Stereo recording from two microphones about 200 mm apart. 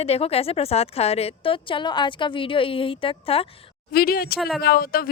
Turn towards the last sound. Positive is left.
turn(degrees=50)  # may be behind; listen again after turning